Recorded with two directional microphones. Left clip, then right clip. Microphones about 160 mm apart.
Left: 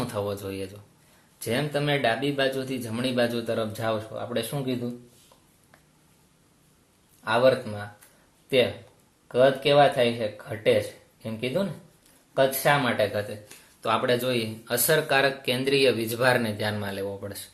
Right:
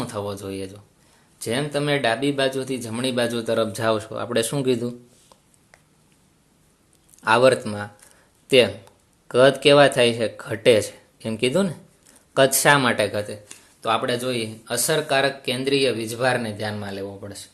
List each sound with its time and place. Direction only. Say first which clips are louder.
0.0 s speech: right 1 dB; 30° right (ahead or behind); by 4.9 s 65° right (ahead or behind)
7.3 s speech: right 5 dB; 65° right (ahead or behind)
9.2 s speech: right 5 dB; 65° right (ahead or behind)
13.8 s speech: right 2 dB; 35° right (ahead or behind)